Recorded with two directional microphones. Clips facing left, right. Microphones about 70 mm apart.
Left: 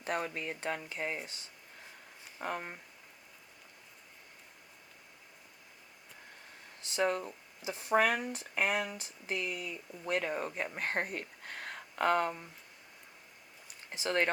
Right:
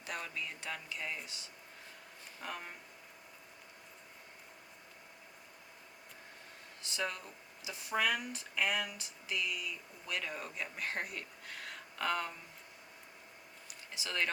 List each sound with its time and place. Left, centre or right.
0.0 s speech: left
2.4 s speech: left
6.9 s speech: left
13.9 s speech: left